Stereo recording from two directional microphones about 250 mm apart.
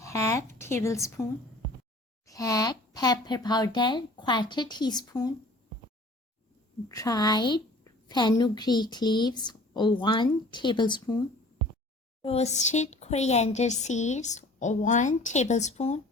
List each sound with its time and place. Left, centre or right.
0.0 s a sound: centre
0.6 s a woman's voice: centre
2.2 s speech: centre
6.8 s speech: centre
12.2 s speech: left